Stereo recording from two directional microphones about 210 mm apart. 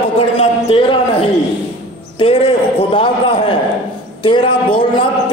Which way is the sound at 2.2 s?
25° left (ahead or behind).